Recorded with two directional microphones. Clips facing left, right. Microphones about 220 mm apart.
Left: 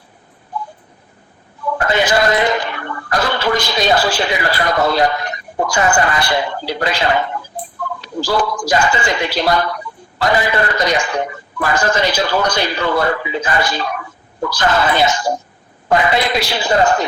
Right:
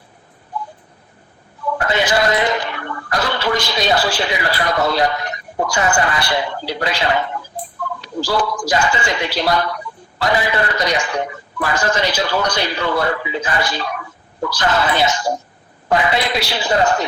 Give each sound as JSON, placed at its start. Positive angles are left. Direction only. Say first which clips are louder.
{"t": 1.8, "sound": "a man's voice", "louder": "left 2 dB", "side_deg": 50}
{"t": 8.3, "sound": "a man's voice", "louder": "left 2 dB", "side_deg": 50}